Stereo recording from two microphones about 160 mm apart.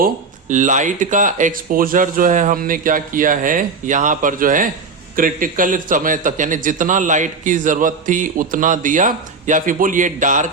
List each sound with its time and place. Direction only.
0.0 s a man's voice: 50° right (ahead or behind)